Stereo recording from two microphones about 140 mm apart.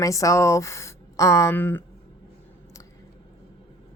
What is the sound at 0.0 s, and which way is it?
A woman's voice, 25° left (ahead or behind).